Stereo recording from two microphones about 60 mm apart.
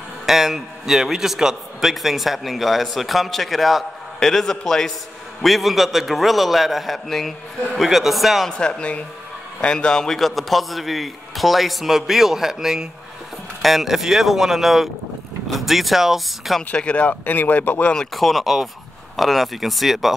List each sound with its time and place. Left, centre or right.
0.3 s a man's voice: centre
8.5 s a man's voice: centre
16.7 s speech: left
18.1 s a man's voice: centre